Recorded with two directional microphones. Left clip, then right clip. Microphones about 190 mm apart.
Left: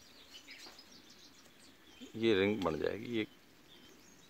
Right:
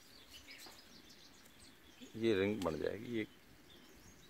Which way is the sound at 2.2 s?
45° left (ahead or behind).